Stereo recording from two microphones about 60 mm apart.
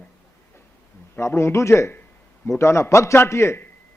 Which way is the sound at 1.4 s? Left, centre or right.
Left.